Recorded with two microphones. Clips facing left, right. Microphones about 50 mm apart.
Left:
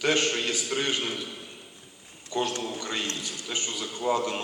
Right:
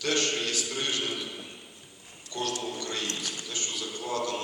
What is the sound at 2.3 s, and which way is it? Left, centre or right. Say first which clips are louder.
A man's voice: left 3 dB; left.